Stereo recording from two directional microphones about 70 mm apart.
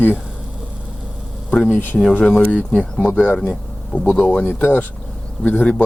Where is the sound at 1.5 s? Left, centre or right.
Centre.